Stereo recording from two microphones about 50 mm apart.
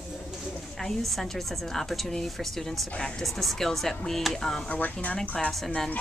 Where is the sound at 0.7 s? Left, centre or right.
Centre.